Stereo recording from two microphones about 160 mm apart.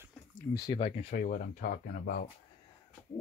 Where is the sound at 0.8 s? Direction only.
40° left (ahead or behind).